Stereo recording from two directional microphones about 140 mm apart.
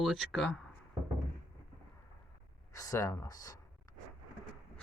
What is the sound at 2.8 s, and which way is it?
Speech, 25° left (ahead or behind).